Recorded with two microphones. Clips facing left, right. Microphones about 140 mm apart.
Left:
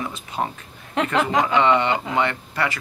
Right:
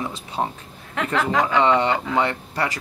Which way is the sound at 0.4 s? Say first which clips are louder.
Right 1 dB; 15° right (ahead or behind).